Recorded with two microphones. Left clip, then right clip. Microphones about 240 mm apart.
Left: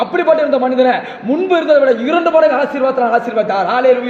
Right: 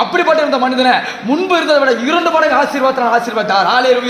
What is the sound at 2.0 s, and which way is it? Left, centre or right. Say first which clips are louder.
A man's voice: left 1 dB; centre.